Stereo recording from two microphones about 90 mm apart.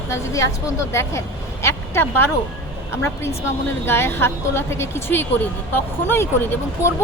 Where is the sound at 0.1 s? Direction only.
35° left (ahead or behind).